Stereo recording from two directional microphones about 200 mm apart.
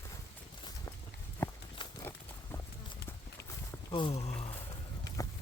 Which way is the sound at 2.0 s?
15° left (ahead or behind).